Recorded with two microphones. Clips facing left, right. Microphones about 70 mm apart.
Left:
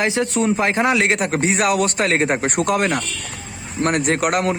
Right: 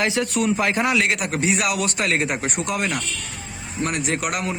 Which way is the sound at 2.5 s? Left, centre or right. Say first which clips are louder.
Left 6 dB; left.